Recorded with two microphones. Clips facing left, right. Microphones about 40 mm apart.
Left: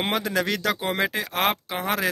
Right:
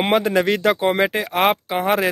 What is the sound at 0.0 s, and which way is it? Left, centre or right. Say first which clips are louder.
Speech: right 7 dB; right.